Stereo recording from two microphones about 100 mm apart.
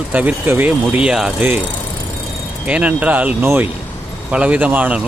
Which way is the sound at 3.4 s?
25° right (ahead or behind).